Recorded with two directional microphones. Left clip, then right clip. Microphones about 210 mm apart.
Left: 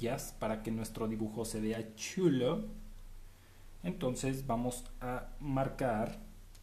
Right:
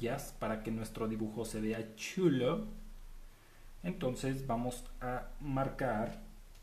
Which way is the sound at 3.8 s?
10° left (ahead or behind).